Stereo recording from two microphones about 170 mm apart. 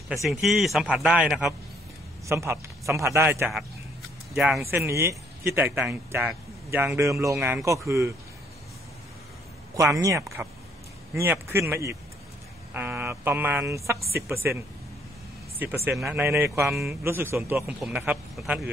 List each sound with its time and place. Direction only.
0.2 s a man's voice: centre (ahead or behind)
2.2 s a man's voice: 15° right (ahead or behind); by 4.6 s centre (ahead or behind)
4.7 s a man's voice: 15° right (ahead or behind)
7.3 s a man's voice: 5° right (ahead or behind)
9.8 s a man's voice: 20° right (ahead or behind)
12.7 s a sound: 10° right (ahead or behind)
14.1 s a man's voice: 15° right (ahead or behind)
15.6 s a man's voice: 10° right (ahead or behind)
17.0 s a man's voice: 15° right (ahead or behind)